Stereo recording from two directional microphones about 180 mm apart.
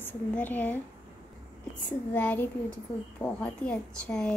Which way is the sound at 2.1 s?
10° left (ahead or behind).